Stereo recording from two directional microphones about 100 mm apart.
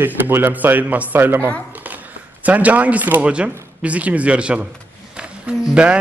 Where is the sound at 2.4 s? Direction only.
15° right (ahead or behind).